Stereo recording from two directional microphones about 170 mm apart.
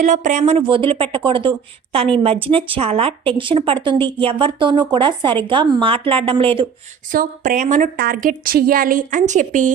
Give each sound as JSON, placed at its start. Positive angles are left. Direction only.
{"t": 0.0, "sound": "speech", "side_deg": -50}
{"t": 7.1, "sound": "a woman's voice", "side_deg": -55}
{"t": 7.9, "sound": "a woman's voice", "side_deg": -60}